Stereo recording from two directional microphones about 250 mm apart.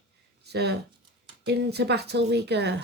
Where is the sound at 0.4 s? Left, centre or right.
Right.